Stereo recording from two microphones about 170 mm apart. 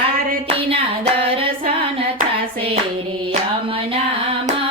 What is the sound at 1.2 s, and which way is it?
Female singing, 30° right (ahead or behind).